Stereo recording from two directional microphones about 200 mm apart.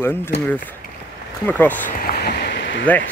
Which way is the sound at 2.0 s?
50° left (ahead or behind).